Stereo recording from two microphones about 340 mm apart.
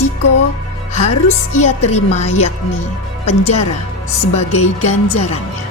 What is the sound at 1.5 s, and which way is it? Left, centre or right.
Music, centre.